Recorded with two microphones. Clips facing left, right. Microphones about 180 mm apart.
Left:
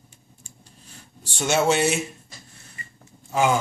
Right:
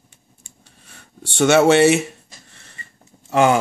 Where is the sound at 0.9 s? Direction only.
70° right (ahead or behind).